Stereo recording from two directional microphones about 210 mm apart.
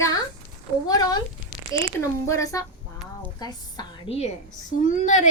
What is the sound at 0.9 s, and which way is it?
A woman's voice, 20° left (ahead or behind).